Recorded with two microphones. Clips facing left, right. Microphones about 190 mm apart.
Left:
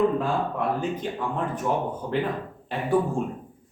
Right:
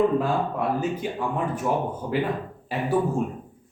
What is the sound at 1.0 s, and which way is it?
Speech, 10° right (ahead or behind).